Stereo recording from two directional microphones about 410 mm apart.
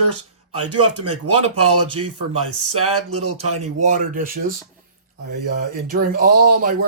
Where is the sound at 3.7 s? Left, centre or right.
Centre.